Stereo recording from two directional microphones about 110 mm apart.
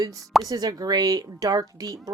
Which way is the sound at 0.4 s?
35° right (ahead or behind).